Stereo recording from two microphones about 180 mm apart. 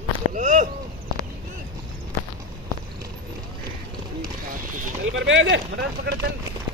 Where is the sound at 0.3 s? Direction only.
45° right (ahead or behind).